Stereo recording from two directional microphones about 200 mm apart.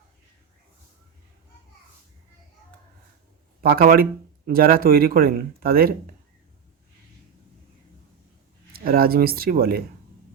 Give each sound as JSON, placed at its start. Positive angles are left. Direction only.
{"t": 3.6, "sound": "speech", "side_deg": -50}
{"t": 8.7, "sound": "speech", "side_deg": -45}